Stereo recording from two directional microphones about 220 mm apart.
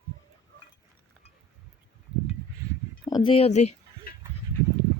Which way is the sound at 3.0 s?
20° left (ahead or behind).